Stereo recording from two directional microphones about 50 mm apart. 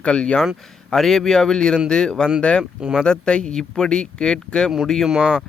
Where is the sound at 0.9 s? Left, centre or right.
Centre.